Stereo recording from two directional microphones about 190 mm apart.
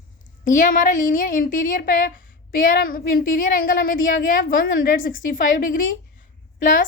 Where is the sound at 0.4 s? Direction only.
45° left (ahead or behind).